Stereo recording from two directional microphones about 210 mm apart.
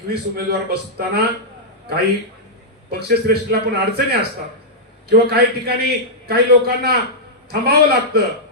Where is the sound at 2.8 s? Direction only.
50° right (ahead or behind).